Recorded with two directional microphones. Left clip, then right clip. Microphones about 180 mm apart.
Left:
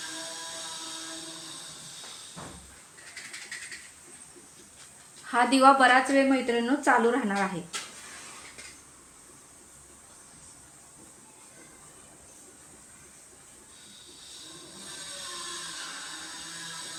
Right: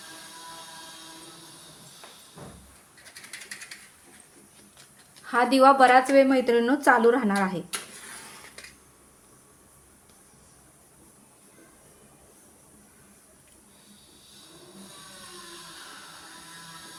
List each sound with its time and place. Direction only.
5.2 s speech: 25° right (ahead or behind)